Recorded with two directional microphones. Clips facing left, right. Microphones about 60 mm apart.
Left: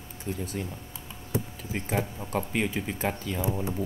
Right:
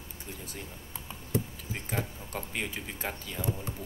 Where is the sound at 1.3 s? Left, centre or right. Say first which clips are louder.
Left 2 dB; centre.